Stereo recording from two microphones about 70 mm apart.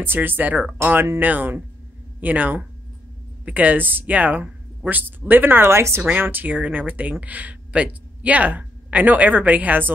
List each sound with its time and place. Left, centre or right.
0.0 s speech: right
6.0 s speech: right